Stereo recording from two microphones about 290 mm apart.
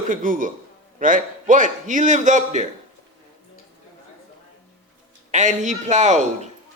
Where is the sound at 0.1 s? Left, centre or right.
Right.